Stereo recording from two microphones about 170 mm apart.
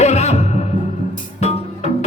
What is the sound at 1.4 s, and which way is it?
Music, 40° left (ahead or behind).